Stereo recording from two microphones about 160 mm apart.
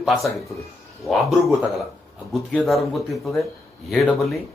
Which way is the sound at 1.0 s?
Centre (ahead or behind).